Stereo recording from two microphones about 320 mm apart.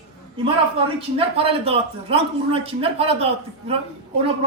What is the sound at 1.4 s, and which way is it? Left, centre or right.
A man's voice, centre.